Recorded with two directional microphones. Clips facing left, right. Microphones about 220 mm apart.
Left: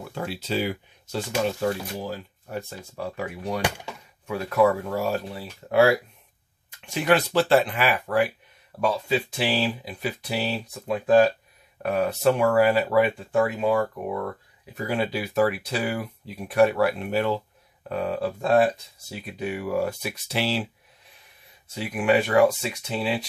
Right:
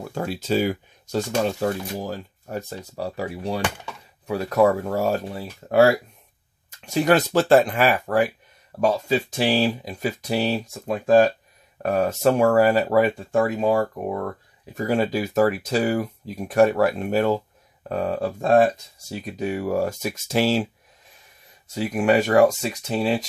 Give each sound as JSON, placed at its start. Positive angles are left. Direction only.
{"t": 0.0, "sound": "speech", "side_deg": -45}
{"t": 3.6, "sound": "speech", "side_deg": 15}
{"t": 4.3, "sound": "speech", "side_deg": -40}
{"t": 21.7, "sound": "speech", "side_deg": -40}